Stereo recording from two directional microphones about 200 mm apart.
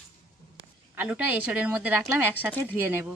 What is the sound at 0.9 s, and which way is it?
A woman's voice, 10° right (ahead or behind).